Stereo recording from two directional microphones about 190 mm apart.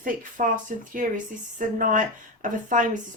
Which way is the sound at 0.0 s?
45° right (ahead or behind).